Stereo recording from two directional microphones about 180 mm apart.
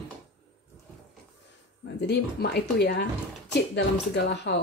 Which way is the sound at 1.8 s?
65° left (ahead or behind).